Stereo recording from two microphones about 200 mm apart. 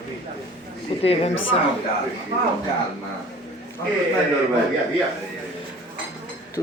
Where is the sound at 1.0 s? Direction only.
30° left (ahead or behind).